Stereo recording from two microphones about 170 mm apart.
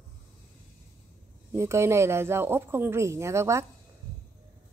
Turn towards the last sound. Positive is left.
turn(degrees=-15)  # may be behind; listen again after turning